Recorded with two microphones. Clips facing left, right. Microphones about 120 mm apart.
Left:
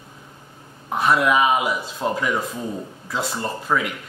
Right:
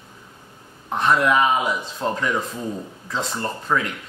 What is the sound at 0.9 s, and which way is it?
Speech, 10° left (ahead or behind).